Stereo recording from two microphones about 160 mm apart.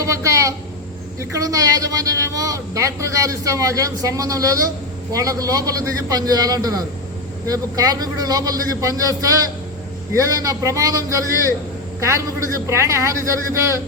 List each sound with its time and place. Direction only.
0.0 s a woman's voice: 20° right (ahead or behind)